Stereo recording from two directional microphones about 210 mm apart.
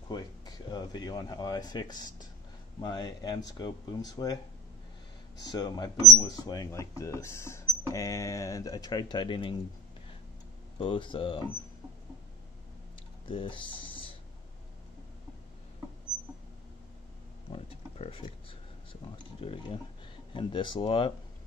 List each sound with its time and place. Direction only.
0.1 s speech: 20° left (ahead or behind)
5.4 s speech: 20° left (ahead or behind)
10.8 s speech: 25° left (ahead or behind)
13.3 s speech: 25° left (ahead or behind)
17.5 s a sound: 30° left (ahead or behind)
19.4 s speech: 25° left (ahead or behind)